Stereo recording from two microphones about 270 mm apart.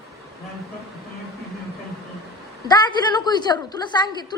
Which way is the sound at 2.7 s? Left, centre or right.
Centre.